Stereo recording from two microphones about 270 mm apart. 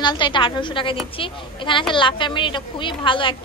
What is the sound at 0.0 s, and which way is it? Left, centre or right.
A woman's voice, centre.